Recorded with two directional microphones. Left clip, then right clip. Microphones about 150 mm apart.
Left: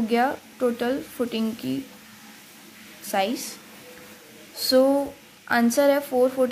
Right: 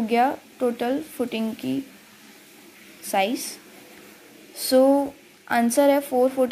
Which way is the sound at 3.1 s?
10° right (ahead or behind).